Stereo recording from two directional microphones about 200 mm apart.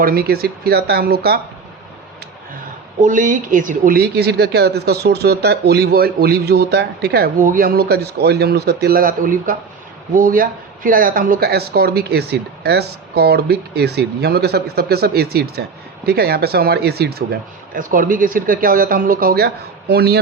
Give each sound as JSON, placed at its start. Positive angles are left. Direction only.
{"t": 0.0, "sound": "speech", "side_deg": -50}
{"t": 3.0, "sound": "speech", "side_deg": -40}